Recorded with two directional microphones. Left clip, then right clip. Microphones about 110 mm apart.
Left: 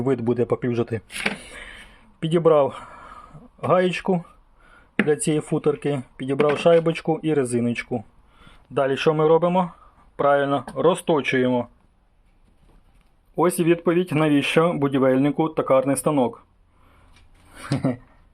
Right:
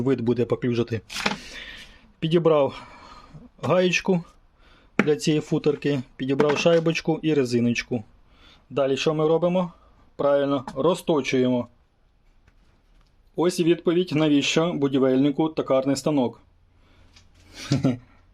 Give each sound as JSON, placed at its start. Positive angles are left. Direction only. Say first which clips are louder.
{"t": 0.0, "sound": "speech", "louder": "left 1 dB", "side_deg": -20}
{"t": 1.4, "sound": "a sound", "louder": "right 1 dB", "side_deg": -35}
{"t": 3.6, "sound": "speech", "louder": "left 1 dB", "side_deg": -25}
{"t": 13.3, "sound": "speech", "louder": "left 2 dB", "side_deg": -10}
{"t": 16.1, "sound": "speech", "louder": "left 3 dB", "side_deg": -25}